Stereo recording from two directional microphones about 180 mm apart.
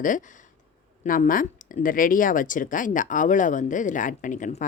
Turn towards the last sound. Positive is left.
turn(degrees=45)  # may be behind; listen again after turning